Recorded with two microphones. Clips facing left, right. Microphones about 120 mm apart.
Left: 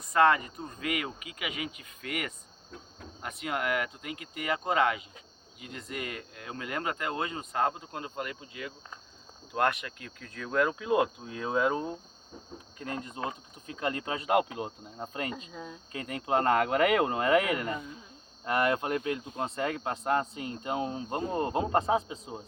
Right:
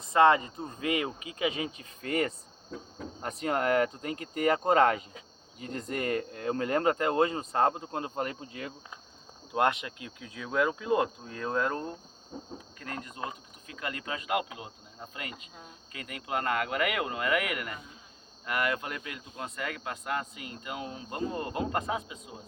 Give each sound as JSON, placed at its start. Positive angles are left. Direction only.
{"t": 0.0, "sound": "speech", "side_deg": -25}
{"t": 9.5, "sound": "speech", "side_deg": -20}
{"t": 12.3, "sound": "speech", "side_deg": -25}
{"t": 12.8, "sound": "speech", "side_deg": 25}